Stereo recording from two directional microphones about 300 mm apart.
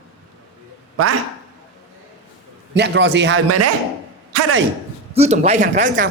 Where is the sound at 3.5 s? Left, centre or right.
Right.